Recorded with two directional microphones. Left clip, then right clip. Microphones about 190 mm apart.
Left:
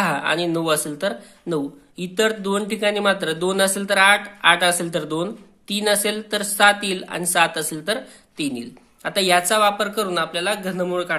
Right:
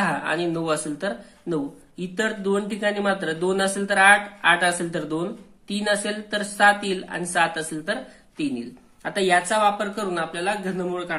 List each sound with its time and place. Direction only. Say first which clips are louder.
0.0 s speech: left 3 dB; 25° left (ahead or behind)